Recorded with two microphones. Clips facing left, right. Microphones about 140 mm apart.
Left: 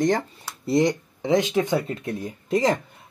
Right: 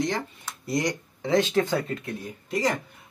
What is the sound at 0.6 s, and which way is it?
Speech, 25° left (ahead or behind).